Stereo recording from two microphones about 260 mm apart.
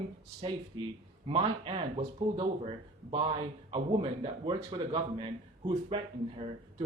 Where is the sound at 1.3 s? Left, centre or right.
Centre.